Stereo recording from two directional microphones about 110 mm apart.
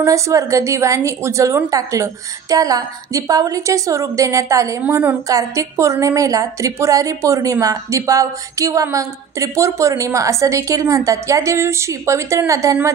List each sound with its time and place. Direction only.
0.0 s a woman's voice: 30° right (ahead or behind)